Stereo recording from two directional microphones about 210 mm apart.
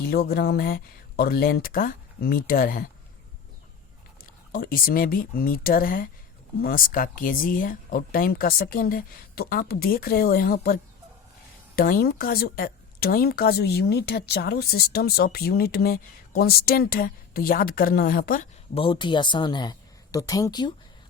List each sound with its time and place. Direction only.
0.0 s a woman's voice: 45° left (ahead or behind)
4.5 s a woman's voice: 45° left (ahead or behind)
11.8 s a woman's voice: 45° left (ahead or behind)
18.7 s speech: 25° left (ahead or behind)